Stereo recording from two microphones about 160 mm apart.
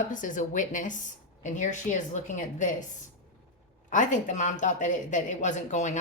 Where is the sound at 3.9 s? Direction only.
50° left (ahead or behind).